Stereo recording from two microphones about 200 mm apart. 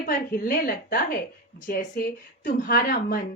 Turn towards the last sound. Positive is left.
turn(degrees=45)  # may be behind; listen again after turning